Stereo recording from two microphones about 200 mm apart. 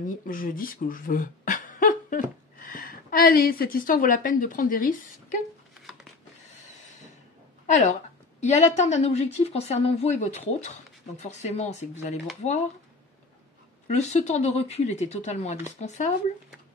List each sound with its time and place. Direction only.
0.0 s speech: 45° left (ahead or behind)
7.7 s a woman's voice: 35° left (ahead or behind)
13.8 s a woman's voice: 35° left (ahead or behind)